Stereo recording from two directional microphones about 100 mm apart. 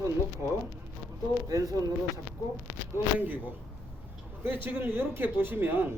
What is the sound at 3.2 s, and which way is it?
Speech, 15° right (ahead or behind).